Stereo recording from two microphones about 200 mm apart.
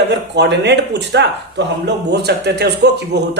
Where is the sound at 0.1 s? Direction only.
60° right (ahead or behind).